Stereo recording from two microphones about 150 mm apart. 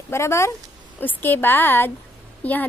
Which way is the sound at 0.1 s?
20° left (ahead or behind).